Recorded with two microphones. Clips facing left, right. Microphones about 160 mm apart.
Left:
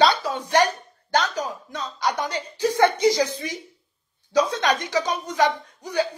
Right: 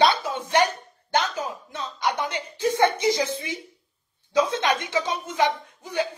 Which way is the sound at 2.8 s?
25° right (ahead or behind).